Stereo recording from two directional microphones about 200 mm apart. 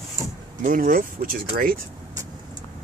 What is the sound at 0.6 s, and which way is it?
Speech, 40° right (ahead or behind).